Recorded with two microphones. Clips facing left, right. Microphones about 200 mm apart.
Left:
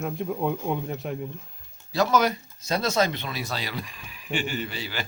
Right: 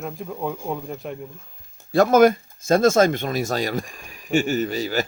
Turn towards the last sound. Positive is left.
turn(degrees=-45)  # may be behind; listen again after turning